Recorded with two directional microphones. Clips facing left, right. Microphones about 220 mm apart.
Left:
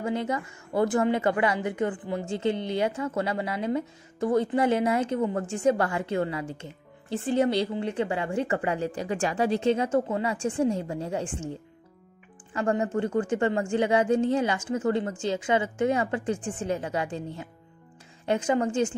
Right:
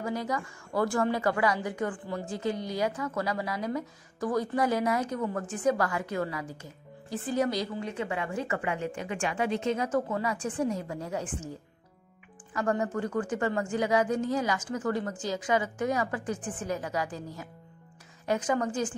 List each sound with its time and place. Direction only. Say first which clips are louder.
0.0 s a woman's voice: left 3 dB; 25° left (ahead or behind)
12.5 s a woman's voice: left 3 dB; 25° left (ahead or behind)